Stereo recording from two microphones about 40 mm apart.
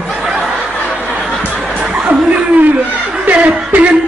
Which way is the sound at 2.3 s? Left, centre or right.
Right.